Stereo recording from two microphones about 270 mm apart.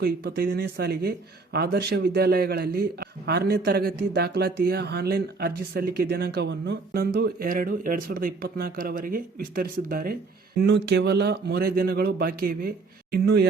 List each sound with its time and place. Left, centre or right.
0.0 s a man's voice: right